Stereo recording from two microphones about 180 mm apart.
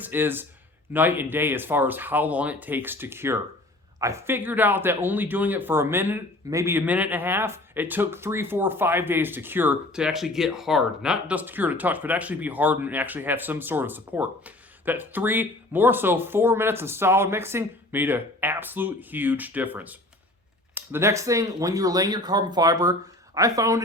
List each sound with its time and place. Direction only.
0.0 s speech: 10° right (ahead or behind)